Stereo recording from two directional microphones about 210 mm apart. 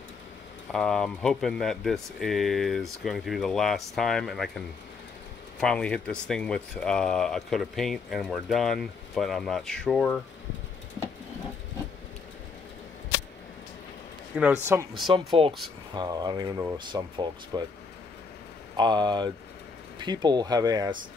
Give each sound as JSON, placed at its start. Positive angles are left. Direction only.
{"t": 0.7, "sound": "speech", "side_deg": 0}
{"t": 14.3, "sound": "speech", "side_deg": -5}
{"t": 15.1, "sound": "speech", "side_deg": -25}
{"t": 18.8, "sound": "speech", "side_deg": -20}